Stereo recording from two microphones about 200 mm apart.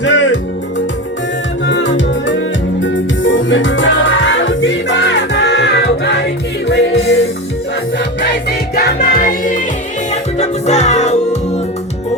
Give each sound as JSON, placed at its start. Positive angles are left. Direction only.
{"t": 0.0, "sound": "music", "side_deg": 65}
{"t": 1.6, "sound": "music", "side_deg": 65}